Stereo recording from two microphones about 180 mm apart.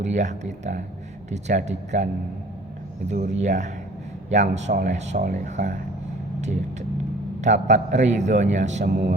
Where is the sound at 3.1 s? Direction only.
40° right (ahead or behind).